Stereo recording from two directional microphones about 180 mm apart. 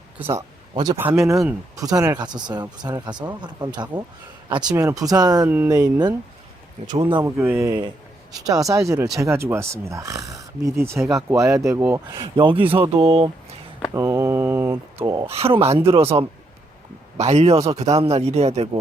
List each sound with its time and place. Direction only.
0.3 s speech: 25° right (ahead or behind)
0.9 s speech: 5° right (ahead or behind)
1.7 s speech: 20° right (ahead or behind)
7.0 s speech: 25° right (ahead or behind)
7.3 s speech: 15° right (ahead or behind); by 13.3 s 30° right (ahead or behind)
13.9 s speech: 15° right (ahead or behind)
14.9 s a man's voice: 25° right (ahead or behind)